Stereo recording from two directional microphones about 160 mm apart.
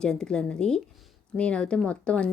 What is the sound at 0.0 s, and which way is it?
A woman's voice, 5° left (ahead or behind).